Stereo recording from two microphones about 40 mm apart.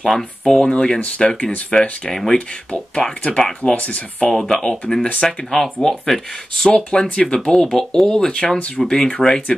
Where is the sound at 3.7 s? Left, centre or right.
Left.